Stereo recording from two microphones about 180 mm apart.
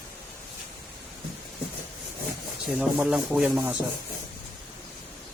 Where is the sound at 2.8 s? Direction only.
5° right (ahead or behind).